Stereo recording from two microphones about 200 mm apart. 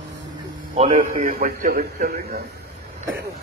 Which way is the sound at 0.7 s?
30° right (ahead or behind).